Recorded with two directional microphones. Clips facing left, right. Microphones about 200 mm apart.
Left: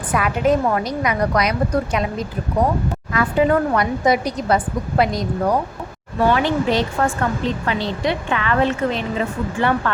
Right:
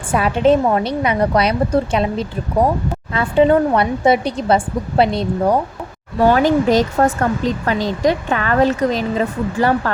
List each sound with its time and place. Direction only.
0.1 s speech: 30° right (ahead or behind)
6.2 s speech: 40° right (ahead or behind)